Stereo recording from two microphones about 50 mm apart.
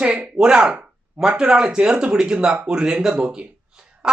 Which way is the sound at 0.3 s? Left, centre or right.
Centre.